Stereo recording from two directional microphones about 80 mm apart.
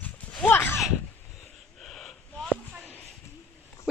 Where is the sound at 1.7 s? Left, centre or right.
Centre.